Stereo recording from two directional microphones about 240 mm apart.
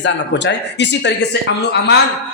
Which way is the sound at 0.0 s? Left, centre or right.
Left.